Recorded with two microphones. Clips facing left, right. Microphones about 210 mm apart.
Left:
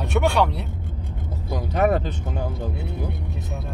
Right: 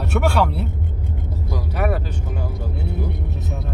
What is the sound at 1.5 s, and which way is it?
Speech, 25° left (ahead or behind).